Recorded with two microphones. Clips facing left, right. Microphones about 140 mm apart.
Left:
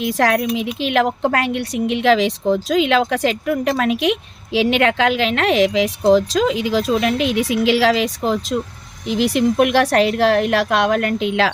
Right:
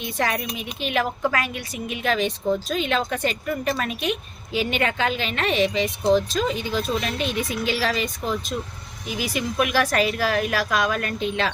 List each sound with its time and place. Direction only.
0.0 s speech: 90° left
9.0 s speech: 65° left (ahead or behind); by 11.5 s 90° left